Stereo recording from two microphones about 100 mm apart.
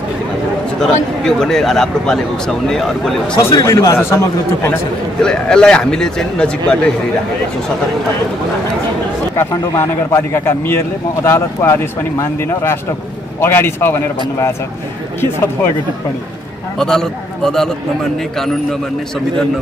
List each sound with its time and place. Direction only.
0.7 s a man's voice: 5° left (ahead or behind)
3.3 s speech: 30° left (ahead or behind)
5.2 s speech: 10° left (ahead or behind)
9.4 s speech: 30° left (ahead or behind)
16.7 s a man's voice: 5° left (ahead or behind)